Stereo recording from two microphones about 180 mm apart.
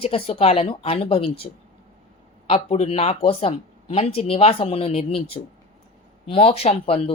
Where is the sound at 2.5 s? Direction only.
35° left (ahead or behind).